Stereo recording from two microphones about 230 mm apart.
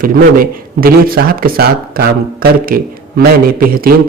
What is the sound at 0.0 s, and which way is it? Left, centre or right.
Speech, right.